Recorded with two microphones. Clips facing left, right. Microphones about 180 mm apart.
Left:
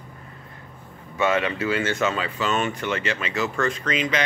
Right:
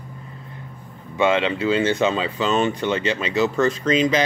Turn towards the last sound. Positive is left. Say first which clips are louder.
# right 6 dB
turn(degrees=-35)  # may be behind; listen again after turning